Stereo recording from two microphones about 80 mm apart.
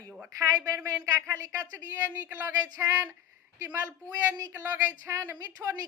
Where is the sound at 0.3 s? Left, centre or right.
Right.